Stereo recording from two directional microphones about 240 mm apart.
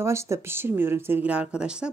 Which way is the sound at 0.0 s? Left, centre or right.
Centre.